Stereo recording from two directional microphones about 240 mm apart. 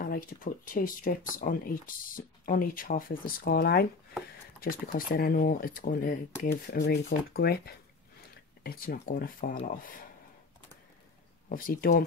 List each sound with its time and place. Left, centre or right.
0.0 s speech: left
11.4 s speech: left